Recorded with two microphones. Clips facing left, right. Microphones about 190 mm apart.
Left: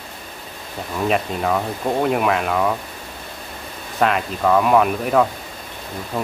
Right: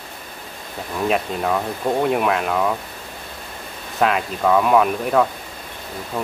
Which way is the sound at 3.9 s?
Centre (ahead or behind).